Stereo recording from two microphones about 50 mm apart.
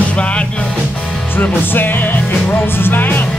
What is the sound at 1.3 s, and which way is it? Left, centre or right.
Music, left.